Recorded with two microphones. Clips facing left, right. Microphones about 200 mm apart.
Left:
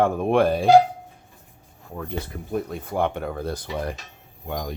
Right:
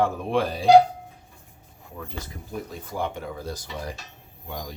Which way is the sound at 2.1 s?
60° left (ahead or behind).